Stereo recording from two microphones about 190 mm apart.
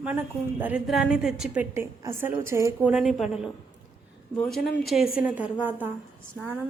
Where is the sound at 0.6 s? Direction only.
5° right (ahead or behind).